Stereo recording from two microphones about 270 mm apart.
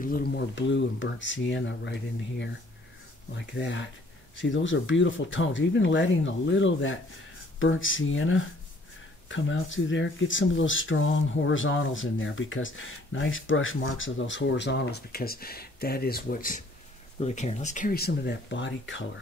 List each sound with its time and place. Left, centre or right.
0.0 s speech: left